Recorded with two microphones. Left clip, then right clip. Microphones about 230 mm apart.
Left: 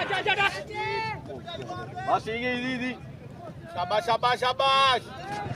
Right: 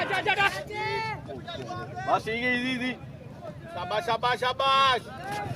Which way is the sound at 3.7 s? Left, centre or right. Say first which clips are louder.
Left 3 dB; left.